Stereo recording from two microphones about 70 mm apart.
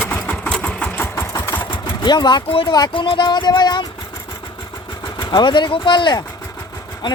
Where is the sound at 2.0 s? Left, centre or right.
Left.